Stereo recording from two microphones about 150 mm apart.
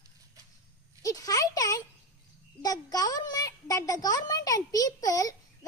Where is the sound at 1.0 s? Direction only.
25° left (ahead or behind).